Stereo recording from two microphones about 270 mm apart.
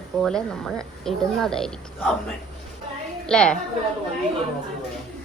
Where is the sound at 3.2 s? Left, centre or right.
Centre.